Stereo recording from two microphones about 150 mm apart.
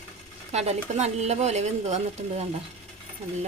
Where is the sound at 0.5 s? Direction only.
45° right (ahead or behind).